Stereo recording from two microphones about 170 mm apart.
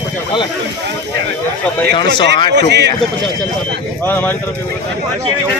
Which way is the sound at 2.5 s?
90° right.